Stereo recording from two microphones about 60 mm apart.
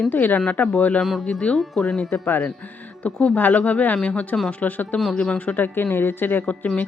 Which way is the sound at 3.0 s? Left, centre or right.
Centre.